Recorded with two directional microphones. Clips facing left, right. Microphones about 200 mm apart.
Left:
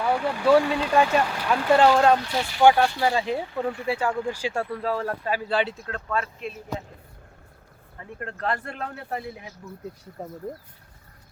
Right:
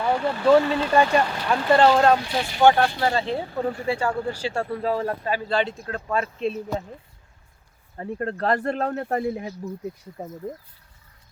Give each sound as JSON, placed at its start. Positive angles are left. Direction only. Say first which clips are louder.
{"t": 0.0, "sound": "speech", "louder": "right 2 dB", "side_deg": 10}
{"t": 2.1, "sound": "speech", "louder": "right 1 dB", "side_deg": -10}
{"t": 2.6, "sound": "speech", "louder": "even", "side_deg": 10}
{"t": 3.3, "sound": "speech", "louder": "right 1 dB", "side_deg": -35}
{"t": 3.8, "sound": "speech", "louder": "right 1 dB", "side_deg": 5}
{"t": 6.4, "sound": "speech", "louder": "right 7 dB", "side_deg": -30}
{"t": 7.9, "sound": "speech", "louder": "right 9 dB", "side_deg": -35}
{"t": 10.2, "sound": "speech", "louder": "right 1 dB", "side_deg": -10}